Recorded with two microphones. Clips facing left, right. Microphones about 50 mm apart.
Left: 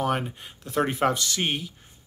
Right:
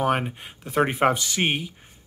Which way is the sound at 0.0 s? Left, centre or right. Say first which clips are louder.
Right 3 dB; right.